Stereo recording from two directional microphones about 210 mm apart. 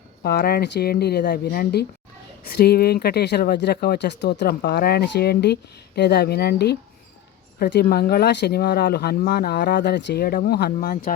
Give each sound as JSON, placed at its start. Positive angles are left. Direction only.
{"t": 0.2, "sound": "speech", "side_deg": 50}